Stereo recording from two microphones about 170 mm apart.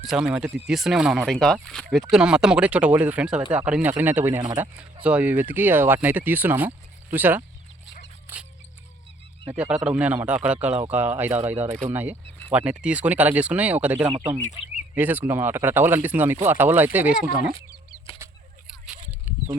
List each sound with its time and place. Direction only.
0.0 s speech: 5° right (ahead or behind)
8.3 s music: 15° right (ahead or behind)
9.5 s speech: 5° right (ahead or behind)
14.1 s speech: 20° right (ahead or behind)
14.9 s speech: 10° right (ahead or behind)
18.2 s a sound: 15° right (ahead or behind)